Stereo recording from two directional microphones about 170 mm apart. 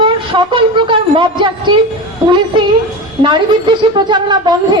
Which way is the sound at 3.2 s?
25° right (ahead or behind).